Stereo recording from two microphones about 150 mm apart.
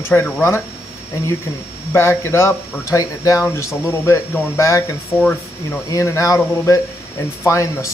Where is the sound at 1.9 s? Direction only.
15° left (ahead or behind).